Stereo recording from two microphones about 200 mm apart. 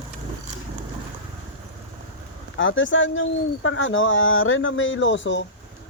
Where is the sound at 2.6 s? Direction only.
70° left (ahead or behind).